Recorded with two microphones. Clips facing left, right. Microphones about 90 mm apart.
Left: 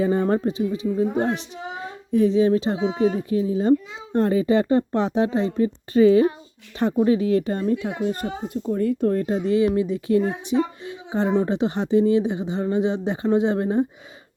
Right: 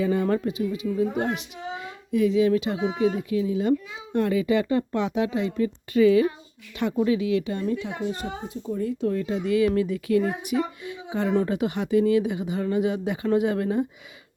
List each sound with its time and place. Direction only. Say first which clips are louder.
0.0 s a woman's voice: left 3 dB; 35° left (ahead or behind)